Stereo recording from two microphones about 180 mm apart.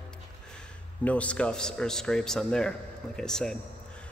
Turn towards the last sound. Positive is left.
turn(degrees=5)  # may be behind; listen again after turning